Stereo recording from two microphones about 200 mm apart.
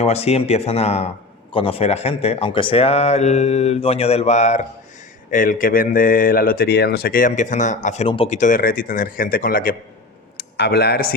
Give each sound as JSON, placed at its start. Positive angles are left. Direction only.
{"t": 0.0, "sound": "a man's voice", "side_deg": 30}